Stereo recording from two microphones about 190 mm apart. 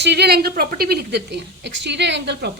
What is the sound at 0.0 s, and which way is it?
A woman's voice, 60° right (ahead or behind).